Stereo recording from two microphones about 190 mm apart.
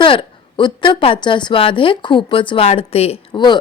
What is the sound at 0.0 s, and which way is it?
A woman's voice, 25° left (ahead or behind).